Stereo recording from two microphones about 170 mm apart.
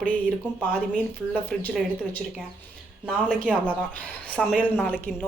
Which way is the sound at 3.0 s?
5° right (ahead or behind).